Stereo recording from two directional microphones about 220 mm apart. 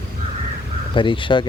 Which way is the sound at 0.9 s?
20° left (ahead or behind).